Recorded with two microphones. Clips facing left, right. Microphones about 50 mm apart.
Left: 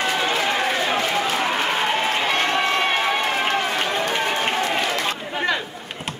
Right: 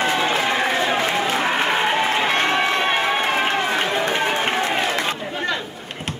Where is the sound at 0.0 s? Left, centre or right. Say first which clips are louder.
Right 2 dB; right.